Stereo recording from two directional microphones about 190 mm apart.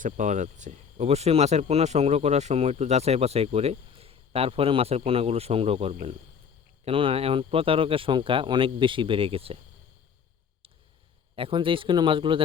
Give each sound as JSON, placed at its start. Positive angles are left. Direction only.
{"t": 0.0, "sound": "speech", "side_deg": -40}
{"t": 11.3, "sound": "speech", "side_deg": -30}